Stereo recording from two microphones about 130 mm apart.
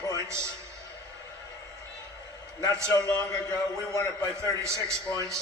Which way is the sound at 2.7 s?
20° right (ahead or behind).